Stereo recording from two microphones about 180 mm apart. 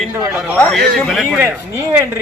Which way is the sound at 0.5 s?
10° left (ahead or behind).